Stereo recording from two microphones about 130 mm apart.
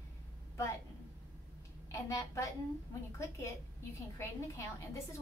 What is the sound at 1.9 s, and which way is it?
A woman's voice, 25° left (ahead or behind).